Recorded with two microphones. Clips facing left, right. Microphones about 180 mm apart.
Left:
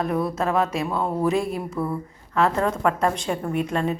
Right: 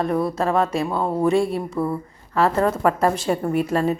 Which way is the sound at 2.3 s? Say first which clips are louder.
Right 2 dB; centre (ahead or behind).